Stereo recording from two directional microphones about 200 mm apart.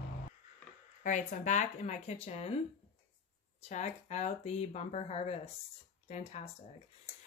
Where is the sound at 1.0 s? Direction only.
40° left (ahead or behind).